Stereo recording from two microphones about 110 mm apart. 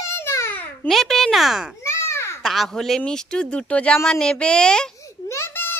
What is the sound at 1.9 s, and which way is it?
Babbling, 25° left (ahead or behind).